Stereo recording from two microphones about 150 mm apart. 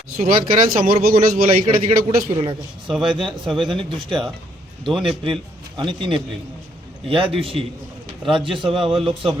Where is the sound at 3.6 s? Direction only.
35° right (ahead or behind).